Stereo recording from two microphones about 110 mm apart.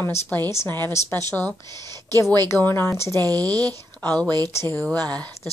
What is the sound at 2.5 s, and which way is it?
Speech, 20° left (ahead or behind).